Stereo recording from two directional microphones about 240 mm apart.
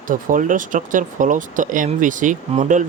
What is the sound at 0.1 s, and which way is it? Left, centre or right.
Speech, right.